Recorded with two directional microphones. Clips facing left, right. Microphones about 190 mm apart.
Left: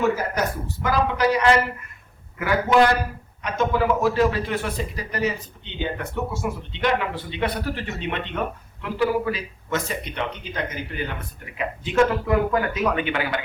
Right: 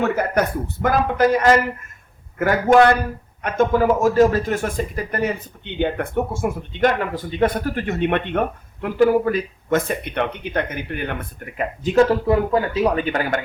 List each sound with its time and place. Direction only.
0.0 s speech: 60° right (ahead or behind); by 12.0 s 40° right (ahead or behind)
12.2 s speech: 30° right (ahead or behind); by 13.4 s 45° right (ahead or behind)